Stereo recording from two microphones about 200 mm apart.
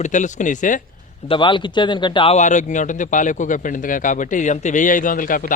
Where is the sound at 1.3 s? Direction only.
25° left (ahead or behind); by 5.5 s 45° left (ahead or behind).